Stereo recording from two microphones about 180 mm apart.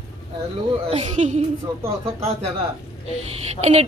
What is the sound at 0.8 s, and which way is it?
Speech, 35° right (ahead or behind).